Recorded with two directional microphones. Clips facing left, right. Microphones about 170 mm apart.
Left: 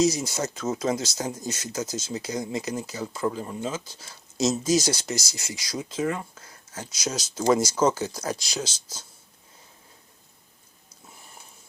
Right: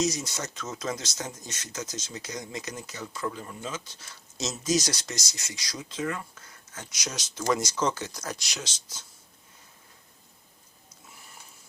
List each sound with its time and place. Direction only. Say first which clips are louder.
0.0 s speech: left 6 dB; 30° left (ahead or behind)